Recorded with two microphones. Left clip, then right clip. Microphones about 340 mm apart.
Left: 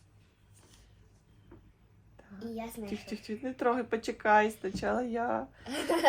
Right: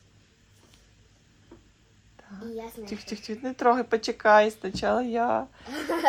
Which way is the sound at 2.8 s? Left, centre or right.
Right.